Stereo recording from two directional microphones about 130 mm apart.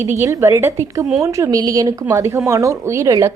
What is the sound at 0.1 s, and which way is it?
A woman's voice, 20° right (ahead or behind).